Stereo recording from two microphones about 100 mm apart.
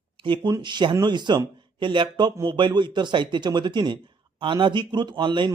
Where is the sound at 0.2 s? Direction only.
50° right (ahead or behind).